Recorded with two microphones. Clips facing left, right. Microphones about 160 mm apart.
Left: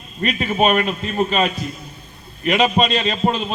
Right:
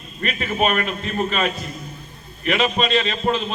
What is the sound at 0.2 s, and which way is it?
A man's voice, 35° left (ahead or behind).